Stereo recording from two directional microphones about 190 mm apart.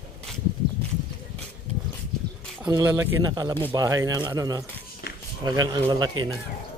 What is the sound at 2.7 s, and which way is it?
Speech, 15° right (ahead or behind).